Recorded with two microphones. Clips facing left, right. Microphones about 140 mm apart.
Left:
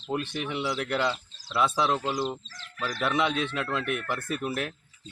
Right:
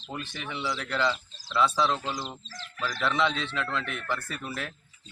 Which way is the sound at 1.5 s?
15° left (ahead or behind).